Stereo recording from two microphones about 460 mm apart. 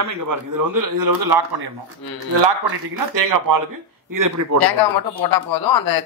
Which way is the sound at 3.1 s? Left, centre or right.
Right.